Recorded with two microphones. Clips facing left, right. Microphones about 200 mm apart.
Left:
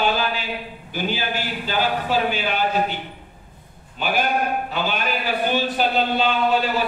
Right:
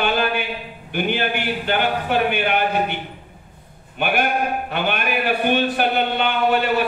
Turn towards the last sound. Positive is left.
turn(degrees=-65)  # may be behind; listen again after turning